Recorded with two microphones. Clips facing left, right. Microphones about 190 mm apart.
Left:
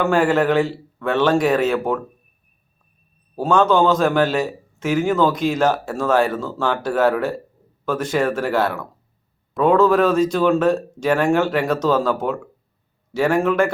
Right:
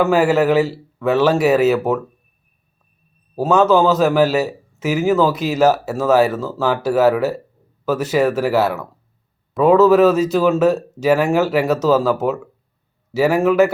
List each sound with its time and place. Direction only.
0.0 s a man's voice: 5° right (ahead or behind)
3.3 s a man's voice: 5° right (ahead or behind)